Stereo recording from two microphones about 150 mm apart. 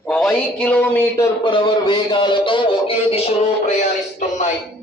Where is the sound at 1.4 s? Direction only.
35° left (ahead or behind).